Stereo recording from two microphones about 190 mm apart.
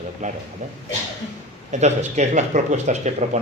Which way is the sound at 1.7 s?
35° right (ahead or behind).